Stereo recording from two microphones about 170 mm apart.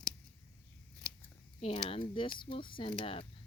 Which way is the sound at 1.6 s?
35° left (ahead or behind).